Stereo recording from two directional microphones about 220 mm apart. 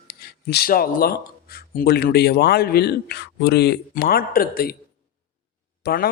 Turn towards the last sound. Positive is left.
turn(degrees=45)  # may be behind; listen again after turning